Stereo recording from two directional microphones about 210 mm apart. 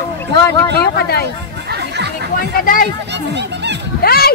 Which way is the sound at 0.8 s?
50° left (ahead or behind).